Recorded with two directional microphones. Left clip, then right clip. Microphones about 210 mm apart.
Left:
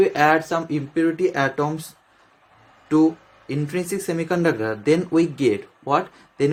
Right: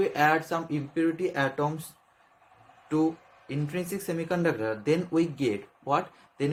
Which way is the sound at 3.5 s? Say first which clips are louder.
Left 8 dB; 20° left (ahead or behind).